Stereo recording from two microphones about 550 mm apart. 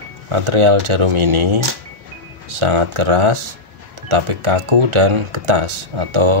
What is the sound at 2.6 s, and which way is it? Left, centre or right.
Speech, right.